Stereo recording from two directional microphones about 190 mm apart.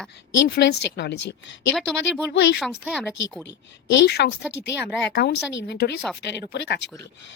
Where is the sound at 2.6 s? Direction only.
Centre (ahead or behind).